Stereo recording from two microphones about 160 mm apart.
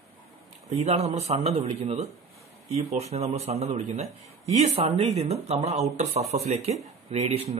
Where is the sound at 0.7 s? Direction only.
40° right (ahead or behind).